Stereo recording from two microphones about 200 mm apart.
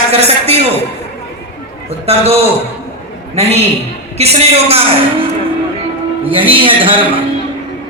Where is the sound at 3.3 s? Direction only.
30° right (ahead or behind).